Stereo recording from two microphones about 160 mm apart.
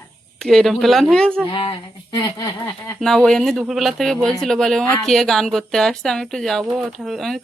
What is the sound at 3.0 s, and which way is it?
Speech, 5° left (ahead or behind).